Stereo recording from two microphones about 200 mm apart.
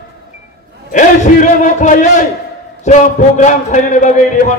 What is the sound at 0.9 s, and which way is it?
A man's voice, 40° left (ahead or behind).